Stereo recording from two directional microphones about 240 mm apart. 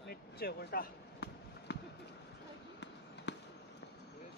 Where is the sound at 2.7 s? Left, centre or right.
Left.